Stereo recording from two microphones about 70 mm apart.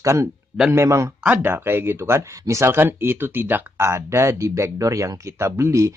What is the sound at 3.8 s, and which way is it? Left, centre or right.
Speech, right.